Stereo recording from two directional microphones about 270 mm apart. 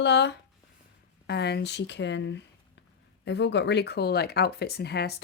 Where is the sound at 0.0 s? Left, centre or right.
Left.